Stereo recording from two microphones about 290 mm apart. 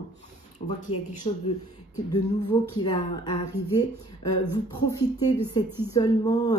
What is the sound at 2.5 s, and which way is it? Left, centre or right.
Speech, centre.